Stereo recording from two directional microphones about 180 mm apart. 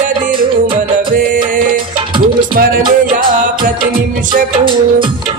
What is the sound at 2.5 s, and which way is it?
Music, 55° right (ahead or behind).